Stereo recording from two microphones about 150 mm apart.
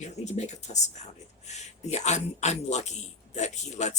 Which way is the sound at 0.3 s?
50° left (ahead or behind).